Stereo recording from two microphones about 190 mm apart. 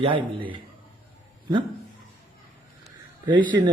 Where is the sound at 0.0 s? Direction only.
25° right (ahead or behind).